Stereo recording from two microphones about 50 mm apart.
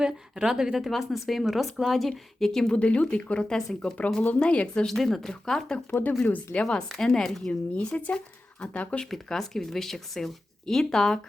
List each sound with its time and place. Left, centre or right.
0.0 s a woman's voice: centre
2.7 s speech: left
3.5 s speech: centre
4.2 s speech: left
4.9 s speech: centre
5.9 s speech: left
6.5 s speech: centre
7.7 s speech: left
9.0 s speech: centre